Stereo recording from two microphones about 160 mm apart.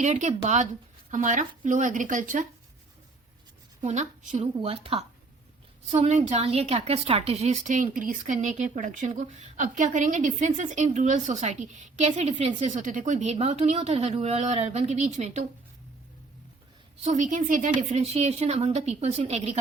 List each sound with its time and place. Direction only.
0.0 s a woman's voice: 45° right (ahead or behind)
3.8 s a woman's voice: 50° right (ahead or behind)
4.5 s speech: 35° right (ahead or behind)
5.9 s a woman's voice: 45° right (ahead or behind)
17.0 s a woman's voice: 50° right (ahead or behind)